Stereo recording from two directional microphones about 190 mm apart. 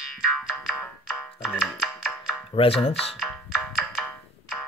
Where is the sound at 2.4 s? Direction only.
30° left (ahead or behind).